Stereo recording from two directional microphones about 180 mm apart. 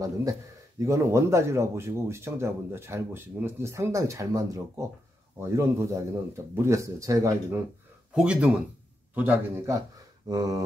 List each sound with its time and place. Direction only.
0.0 s speech: 20° right (ahead or behind)
8.1 s speech: 5° right (ahead or behind)